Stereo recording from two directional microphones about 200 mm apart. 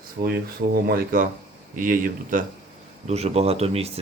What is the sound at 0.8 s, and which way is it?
Speech, 45° right (ahead or behind).